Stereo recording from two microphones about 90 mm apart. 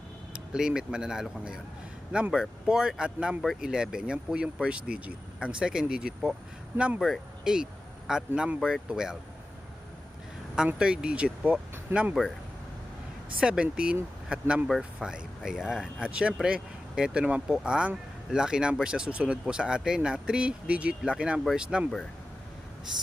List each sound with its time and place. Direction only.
0.5 s speech: 5° right (ahead or behind)
10.8 s speech: 10° right (ahead or behind)
13.4 s speech: 10° right (ahead or behind)